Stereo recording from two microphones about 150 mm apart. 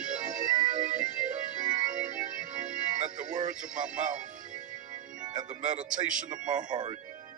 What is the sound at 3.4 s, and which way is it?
Speech, 60° right (ahead or behind).